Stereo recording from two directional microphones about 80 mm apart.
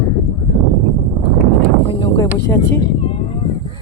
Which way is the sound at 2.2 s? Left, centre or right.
Left.